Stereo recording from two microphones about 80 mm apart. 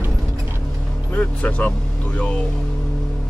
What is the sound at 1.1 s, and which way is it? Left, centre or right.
Music, centre.